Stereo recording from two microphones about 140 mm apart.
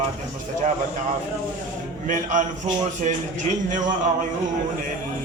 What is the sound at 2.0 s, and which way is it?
A man's voice, 65° right (ahead or behind).